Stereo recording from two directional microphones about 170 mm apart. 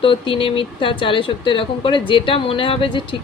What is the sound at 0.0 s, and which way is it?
Speech, 30° left (ahead or behind).